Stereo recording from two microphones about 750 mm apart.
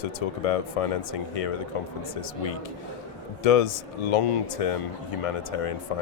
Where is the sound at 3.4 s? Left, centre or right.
Left.